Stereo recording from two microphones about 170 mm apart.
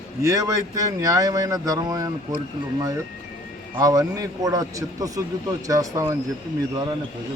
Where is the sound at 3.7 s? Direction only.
20° right (ahead or behind).